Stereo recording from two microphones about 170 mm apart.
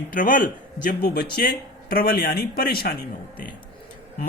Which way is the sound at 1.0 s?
70° left (ahead or behind).